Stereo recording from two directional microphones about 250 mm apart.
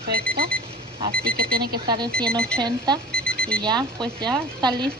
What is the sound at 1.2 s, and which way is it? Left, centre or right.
Speech, right.